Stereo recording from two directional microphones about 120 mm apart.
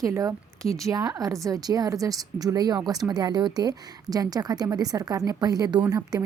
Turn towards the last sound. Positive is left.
turn(degrees=-30)  # may be behind; listen again after turning